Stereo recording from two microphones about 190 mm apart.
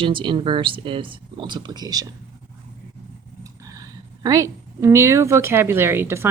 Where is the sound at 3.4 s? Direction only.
20° right (ahead or behind).